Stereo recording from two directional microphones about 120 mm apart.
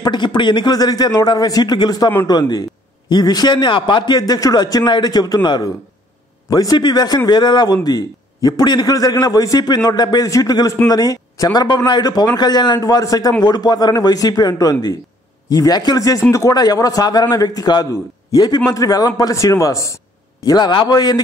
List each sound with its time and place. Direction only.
0.0 s a man's voice: 40° left (ahead or behind)
20.4 s a man's voice: 35° left (ahead or behind)